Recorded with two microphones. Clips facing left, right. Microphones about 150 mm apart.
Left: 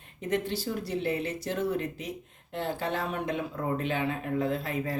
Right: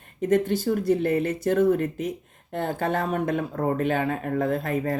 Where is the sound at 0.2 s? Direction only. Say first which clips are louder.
Right 8 dB; 50° right (ahead or behind).